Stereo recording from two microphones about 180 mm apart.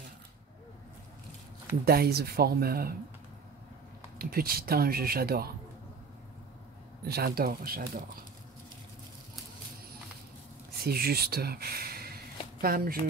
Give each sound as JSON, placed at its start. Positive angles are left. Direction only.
{"t": 1.9, "sound": "speech", "side_deg": -60}
{"t": 4.2, "sound": "speech", "side_deg": -55}
{"t": 7.1, "sound": "speech", "side_deg": -60}
{"t": 10.8, "sound": "speech", "side_deg": -60}